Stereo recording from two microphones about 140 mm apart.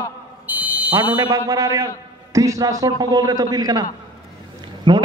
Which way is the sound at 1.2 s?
25° right (ahead or behind).